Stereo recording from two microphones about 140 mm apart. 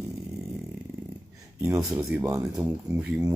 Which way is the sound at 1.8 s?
5° right (ahead or behind).